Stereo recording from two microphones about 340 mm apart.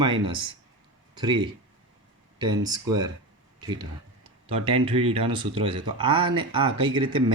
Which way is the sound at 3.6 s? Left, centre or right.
Centre.